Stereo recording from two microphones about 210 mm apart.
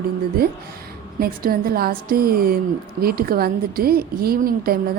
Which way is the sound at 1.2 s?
45° right (ahead or behind).